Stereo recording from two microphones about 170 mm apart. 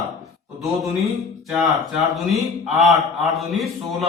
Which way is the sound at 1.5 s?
Centre (ahead or behind).